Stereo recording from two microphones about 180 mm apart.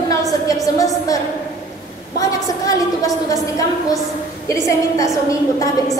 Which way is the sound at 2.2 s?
20° left (ahead or behind).